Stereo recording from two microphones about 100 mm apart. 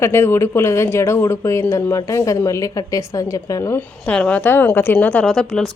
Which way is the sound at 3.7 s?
15° left (ahead or behind).